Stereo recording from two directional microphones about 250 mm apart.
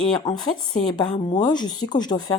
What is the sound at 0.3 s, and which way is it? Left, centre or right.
Speech, centre.